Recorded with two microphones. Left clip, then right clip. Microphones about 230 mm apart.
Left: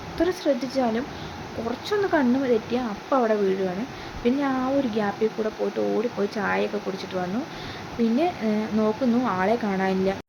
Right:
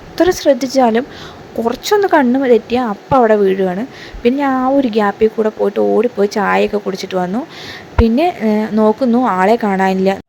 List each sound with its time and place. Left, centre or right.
0.2 s speech: right